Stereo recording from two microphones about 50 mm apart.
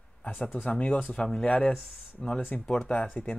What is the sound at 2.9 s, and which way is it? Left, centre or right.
Speech, left.